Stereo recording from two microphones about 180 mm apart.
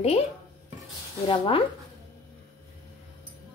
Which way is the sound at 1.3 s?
30° left (ahead or behind).